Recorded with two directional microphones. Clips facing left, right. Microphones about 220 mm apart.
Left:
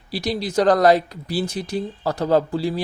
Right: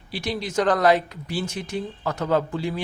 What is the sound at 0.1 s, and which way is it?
Speech, 35° left (ahead or behind).